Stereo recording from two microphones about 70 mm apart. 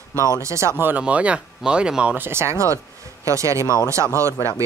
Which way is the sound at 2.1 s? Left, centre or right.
Right.